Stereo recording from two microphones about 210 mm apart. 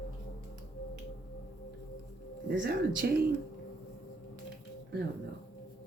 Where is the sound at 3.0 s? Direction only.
50° right (ahead or behind).